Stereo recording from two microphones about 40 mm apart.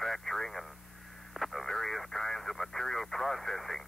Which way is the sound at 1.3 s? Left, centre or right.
Centre.